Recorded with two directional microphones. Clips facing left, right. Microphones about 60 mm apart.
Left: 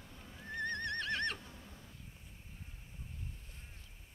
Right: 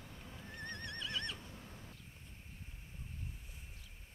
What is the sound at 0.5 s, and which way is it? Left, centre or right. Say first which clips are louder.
Neigh: left 9 dB; left.